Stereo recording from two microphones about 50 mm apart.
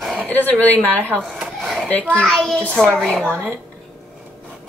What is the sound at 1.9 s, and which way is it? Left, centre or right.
Speech, left.